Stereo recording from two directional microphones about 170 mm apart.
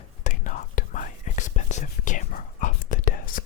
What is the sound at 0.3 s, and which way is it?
Whispering, 50° left (ahead or behind).